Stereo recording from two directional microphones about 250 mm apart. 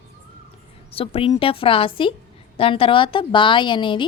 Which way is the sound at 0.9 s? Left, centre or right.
Left.